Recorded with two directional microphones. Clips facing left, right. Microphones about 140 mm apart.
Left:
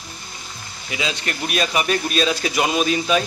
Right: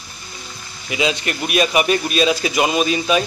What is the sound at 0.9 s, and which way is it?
A man's voice, 15° right (ahead or behind).